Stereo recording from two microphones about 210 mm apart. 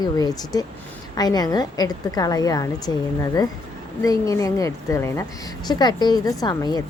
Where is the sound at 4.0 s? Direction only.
15° left (ahead or behind).